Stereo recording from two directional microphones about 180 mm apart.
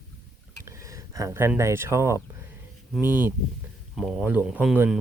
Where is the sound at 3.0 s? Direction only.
10° right (ahead or behind).